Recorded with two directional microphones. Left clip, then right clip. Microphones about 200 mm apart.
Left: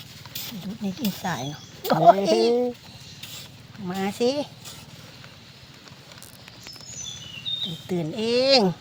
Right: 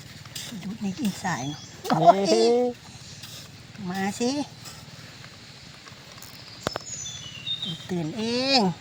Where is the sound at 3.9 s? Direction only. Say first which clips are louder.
Left 3 dB; 40° left (ahead or behind).